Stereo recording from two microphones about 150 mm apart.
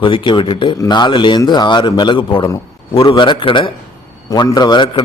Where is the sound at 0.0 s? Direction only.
35° left (ahead or behind).